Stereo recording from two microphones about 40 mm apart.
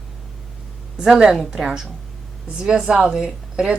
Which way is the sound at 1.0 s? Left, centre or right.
Centre.